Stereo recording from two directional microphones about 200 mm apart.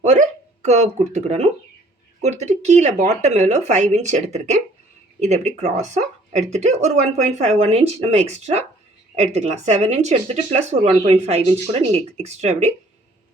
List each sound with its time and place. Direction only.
0.0 s speech: 35° right (ahead or behind)